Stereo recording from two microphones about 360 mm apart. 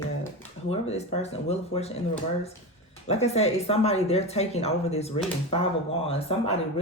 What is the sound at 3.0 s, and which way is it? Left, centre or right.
Speech, centre.